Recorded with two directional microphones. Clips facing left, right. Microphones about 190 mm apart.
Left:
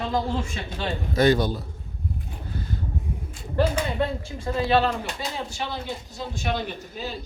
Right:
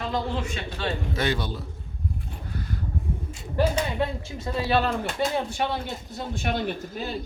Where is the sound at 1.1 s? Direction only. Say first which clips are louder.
Left 11 dB; 40° left (ahead or behind).